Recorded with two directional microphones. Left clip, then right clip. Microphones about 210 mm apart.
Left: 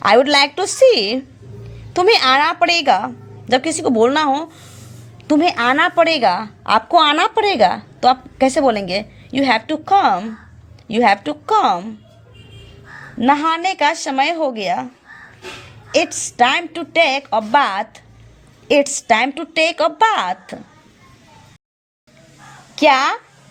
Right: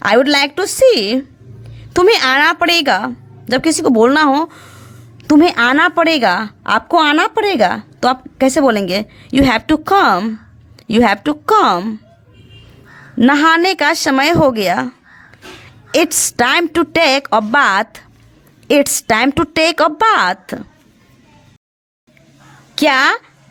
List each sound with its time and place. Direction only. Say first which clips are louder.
0.0 s a woman's voice: even; 15° right (ahead or behind)
13.1 s a woman's voice: right 5 dB; 25° right (ahead or behind)
16.4 s a woman's voice: right 2 dB; 30° right (ahead or behind)
22.7 s a woman's voice: right 1 dB; 25° right (ahead or behind)